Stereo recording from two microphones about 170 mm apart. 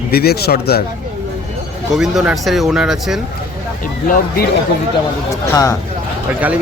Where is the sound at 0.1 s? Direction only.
65° left (ahead or behind).